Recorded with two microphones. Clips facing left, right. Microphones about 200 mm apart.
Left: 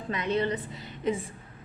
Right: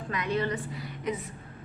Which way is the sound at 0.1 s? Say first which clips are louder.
Left 2 dB; 25° left (ahead or behind).